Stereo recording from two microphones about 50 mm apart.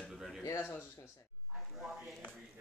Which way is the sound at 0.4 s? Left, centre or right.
Left.